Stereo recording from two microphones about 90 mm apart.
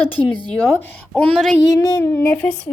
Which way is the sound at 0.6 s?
25° left (ahead or behind).